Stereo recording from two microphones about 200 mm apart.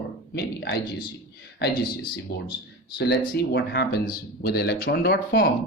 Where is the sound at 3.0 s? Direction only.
55° left (ahead or behind).